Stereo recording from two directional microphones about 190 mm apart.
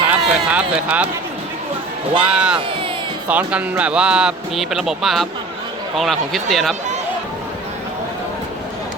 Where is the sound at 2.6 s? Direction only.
25° right (ahead or behind).